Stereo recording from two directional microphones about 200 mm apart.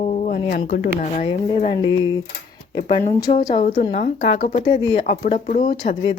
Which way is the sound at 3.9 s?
35° left (ahead or behind).